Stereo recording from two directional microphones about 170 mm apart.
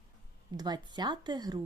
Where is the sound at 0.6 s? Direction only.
25° right (ahead or behind).